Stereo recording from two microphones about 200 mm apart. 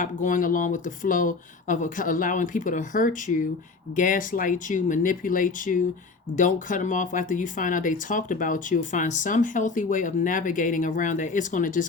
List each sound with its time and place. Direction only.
0.0 s speech: 40° left (ahead or behind)